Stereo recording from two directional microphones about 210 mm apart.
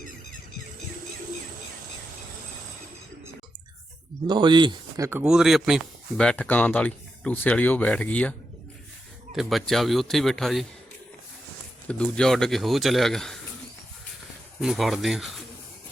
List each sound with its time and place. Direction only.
4.3 s speech: 20° right (ahead or behind)
5.2 s speech: centre (ahead or behind)
11.9 s speech: 5° left (ahead or behind)
14.6 s speech: centre (ahead or behind)